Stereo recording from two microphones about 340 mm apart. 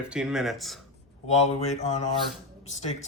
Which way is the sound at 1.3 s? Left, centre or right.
Centre.